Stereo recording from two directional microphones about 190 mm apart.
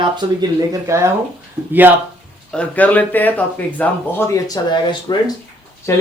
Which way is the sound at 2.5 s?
5° left (ahead or behind).